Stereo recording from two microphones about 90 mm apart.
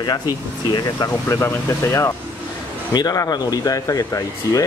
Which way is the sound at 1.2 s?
30° left (ahead or behind).